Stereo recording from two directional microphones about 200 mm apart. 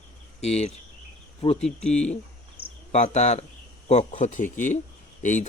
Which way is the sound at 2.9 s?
35° left (ahead or behind).